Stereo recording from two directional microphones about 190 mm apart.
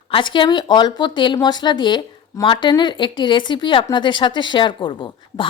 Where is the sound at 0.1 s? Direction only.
25° left (ahead or behind).